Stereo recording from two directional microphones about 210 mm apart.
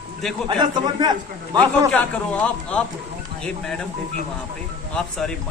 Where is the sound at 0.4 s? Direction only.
20° right (ahead or behind).